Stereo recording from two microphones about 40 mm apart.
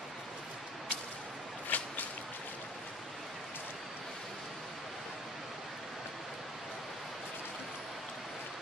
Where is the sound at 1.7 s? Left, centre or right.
Left.